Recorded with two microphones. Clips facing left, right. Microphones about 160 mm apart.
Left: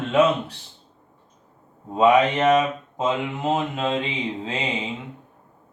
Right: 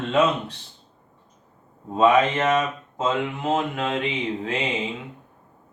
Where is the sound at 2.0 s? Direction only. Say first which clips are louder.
Left 1 dB; 15° left (ahead or behind).